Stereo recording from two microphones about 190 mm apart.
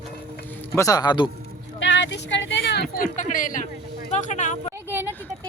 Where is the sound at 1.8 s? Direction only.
70° left (ahead or behind).